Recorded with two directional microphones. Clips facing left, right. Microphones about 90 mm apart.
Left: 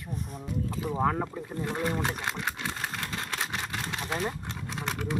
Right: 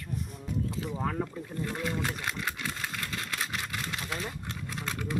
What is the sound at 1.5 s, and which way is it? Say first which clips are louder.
Speech: left 3 dB; 25° left (ahead or behind).